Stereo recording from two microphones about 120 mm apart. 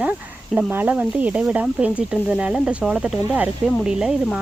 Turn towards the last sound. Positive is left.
turn(degrees=-5)  # may be behind; listen again after turning